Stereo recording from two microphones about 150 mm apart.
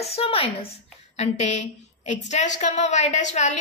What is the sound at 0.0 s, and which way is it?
A woman's voice, 40° left (ahead or behind).